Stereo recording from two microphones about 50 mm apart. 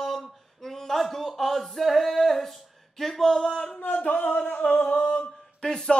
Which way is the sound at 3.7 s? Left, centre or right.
Left.